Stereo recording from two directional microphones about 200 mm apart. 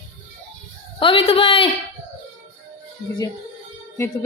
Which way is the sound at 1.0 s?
25° left (ahead or behind).